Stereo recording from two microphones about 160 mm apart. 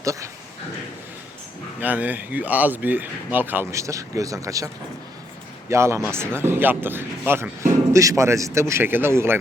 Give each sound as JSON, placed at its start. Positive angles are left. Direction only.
{"t": 0.0, "sound": "speech", "side_deg": -20}
{"t": 1.8, "sound": "speech", "side_deg": -10}